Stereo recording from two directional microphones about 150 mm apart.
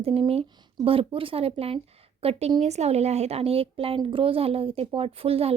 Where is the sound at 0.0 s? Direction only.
40° right (ahead or behind).